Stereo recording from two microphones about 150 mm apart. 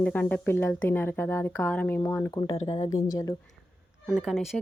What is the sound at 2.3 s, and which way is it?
Speech, 35° left (ahead or behind).